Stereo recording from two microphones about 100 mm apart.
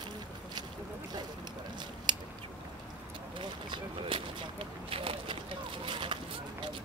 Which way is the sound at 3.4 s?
55° right (ahead or behind).